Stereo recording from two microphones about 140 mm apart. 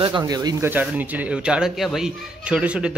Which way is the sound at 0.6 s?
10° right (ahead or behind).